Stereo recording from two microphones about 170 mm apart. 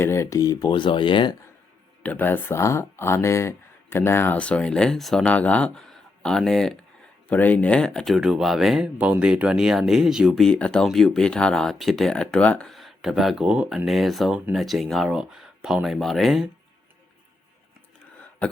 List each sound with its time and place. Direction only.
0.0 s speech: 15° left (ahead or behind)
2.0 s speech: 10° left (ahead or behind)